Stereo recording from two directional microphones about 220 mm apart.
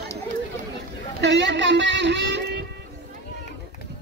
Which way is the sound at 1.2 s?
55° right (ahead or behind).